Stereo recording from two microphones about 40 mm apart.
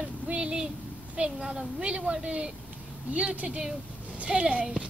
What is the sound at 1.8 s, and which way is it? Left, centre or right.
Speech, right.